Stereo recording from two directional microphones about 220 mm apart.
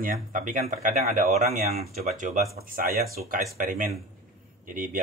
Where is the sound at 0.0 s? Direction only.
40° right (ahead or behind).